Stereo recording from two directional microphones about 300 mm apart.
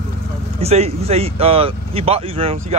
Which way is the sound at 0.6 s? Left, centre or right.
Right.